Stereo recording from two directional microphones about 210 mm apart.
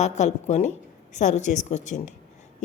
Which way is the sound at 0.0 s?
30° left (ahead or behind).